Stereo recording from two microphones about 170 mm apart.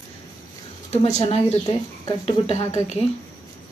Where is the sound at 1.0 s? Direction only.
35° left (ahead or behind).